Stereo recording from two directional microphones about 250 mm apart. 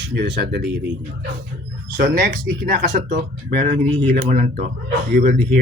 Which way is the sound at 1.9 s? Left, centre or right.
Right.